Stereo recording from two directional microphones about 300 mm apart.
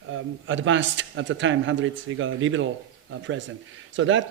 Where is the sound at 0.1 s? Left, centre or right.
Right.